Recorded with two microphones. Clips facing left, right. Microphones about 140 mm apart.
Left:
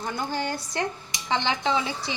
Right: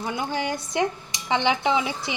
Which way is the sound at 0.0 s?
10° right (ahead or behind).